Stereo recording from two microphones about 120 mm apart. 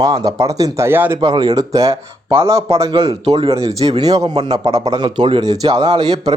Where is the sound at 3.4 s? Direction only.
55° right (ahead or behind).